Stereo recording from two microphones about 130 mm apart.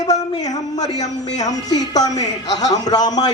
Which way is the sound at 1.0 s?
65° left (ahead or behind).